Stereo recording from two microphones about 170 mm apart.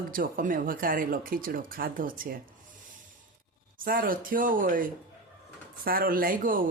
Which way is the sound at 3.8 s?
55° right (ahead or behind).